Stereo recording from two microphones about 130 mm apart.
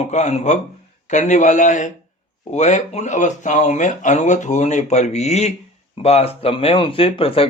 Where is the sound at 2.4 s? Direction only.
65° left (ahead or behind).